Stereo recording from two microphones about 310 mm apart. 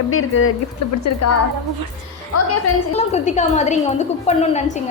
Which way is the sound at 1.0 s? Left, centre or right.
Left.